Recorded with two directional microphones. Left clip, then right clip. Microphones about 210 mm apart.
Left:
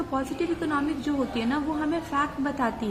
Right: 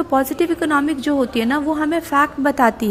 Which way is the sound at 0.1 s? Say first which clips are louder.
Right 12 dB; 40° right (ahead or behind).